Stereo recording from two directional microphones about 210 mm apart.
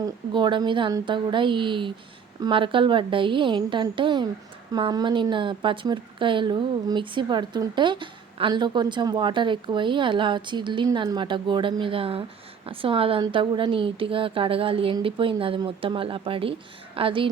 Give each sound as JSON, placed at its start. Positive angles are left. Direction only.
{"t": 0.0, "sound": "a woman's voice", "side_deg": -20}